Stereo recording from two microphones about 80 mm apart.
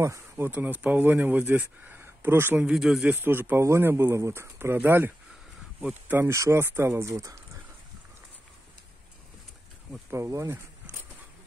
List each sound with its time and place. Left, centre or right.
0.0 s a sound: right
0.5 s speech: centre
2.6 s speech: centre
3.1 s speech: right
6.2 s speech: right
10.1 s speech: right